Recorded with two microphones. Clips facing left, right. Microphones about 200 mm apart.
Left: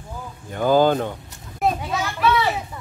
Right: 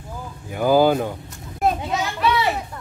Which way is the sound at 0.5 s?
10° right (ahead or behind).